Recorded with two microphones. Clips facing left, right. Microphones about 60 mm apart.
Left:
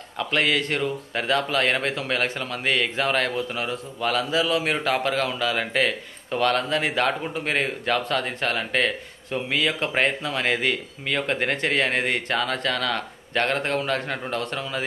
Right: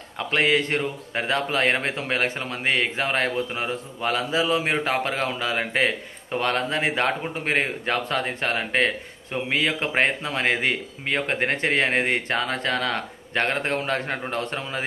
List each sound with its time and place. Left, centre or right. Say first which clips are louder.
0.3 s a man's voice: right 2 dB; right